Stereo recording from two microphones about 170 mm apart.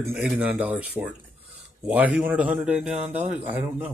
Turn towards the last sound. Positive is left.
turn(degrees=-10)  # may be behind; listen again after turning